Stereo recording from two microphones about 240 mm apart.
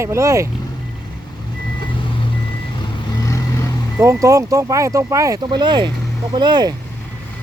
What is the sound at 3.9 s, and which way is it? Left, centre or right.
Speech, centre.